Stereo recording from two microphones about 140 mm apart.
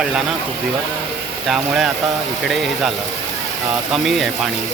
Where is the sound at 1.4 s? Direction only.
Centre (ahead or behind).